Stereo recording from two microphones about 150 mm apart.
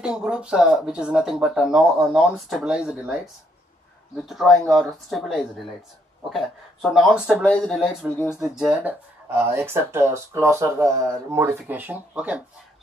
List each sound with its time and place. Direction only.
0.0 s speech: 5° right (ahead or behind)
4.3 s speech: centre (ahead or behind)